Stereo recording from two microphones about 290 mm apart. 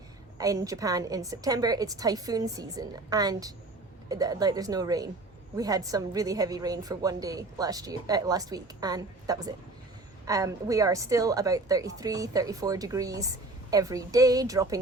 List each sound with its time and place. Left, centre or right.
0.3 s a woman's voice: centre